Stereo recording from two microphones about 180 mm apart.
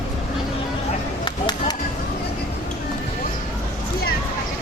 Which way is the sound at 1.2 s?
25° left (ahead or behind).